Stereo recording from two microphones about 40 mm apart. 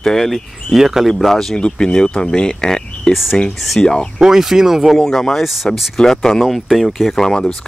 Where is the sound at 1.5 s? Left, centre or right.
Left.